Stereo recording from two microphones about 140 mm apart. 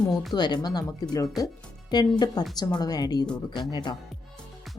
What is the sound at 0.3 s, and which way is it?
Speech, 30° left (ahead or behind).